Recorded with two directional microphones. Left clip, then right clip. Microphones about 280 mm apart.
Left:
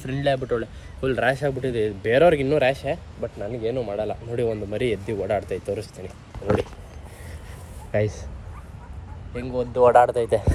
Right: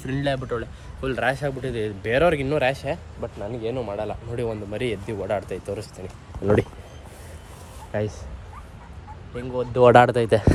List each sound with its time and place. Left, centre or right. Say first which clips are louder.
0.0 s speech: left 3 dB; centre
9.4 s speech: right 1 dB; right; by 10.5 s centre